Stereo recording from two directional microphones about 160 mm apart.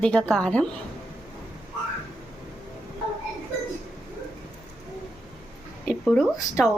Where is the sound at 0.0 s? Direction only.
5° left (ahead or behind).